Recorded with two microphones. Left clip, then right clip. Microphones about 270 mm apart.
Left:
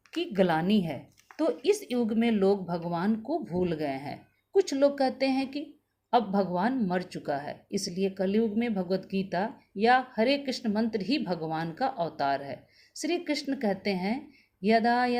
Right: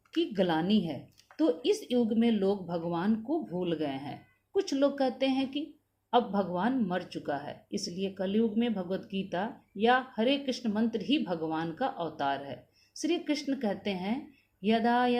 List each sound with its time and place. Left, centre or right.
0.1 s speech: left